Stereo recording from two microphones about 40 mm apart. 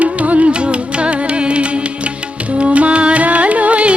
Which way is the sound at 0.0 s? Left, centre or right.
Right.